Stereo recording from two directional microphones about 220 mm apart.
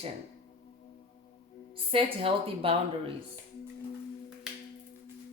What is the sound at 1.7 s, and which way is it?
Speech, 25° right (ahead or behind).